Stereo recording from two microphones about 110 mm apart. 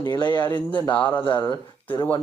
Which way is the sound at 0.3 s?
40° left (ahead or behind).